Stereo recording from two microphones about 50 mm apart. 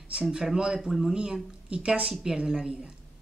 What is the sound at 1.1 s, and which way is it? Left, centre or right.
Speech, centre.